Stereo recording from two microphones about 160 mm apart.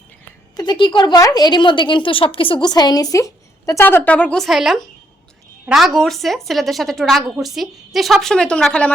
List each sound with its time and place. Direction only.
0.5 s speech: 30° left (ahead or behind); by 8.9 s 5° left (ahead or behind)